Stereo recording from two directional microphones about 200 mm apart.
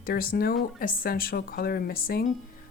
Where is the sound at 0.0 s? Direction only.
45° left (ahead or behind).